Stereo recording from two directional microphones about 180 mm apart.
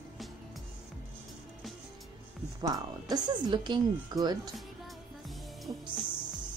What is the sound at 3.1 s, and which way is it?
A woman's voice, 25° right (ahead or behind).